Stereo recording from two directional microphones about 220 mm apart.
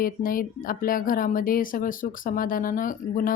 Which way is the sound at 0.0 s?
40° left (ahead or behind).